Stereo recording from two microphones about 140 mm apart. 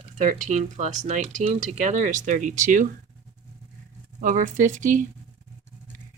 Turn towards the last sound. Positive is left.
turn(degrees=-65)  # may be behind; listen again after turning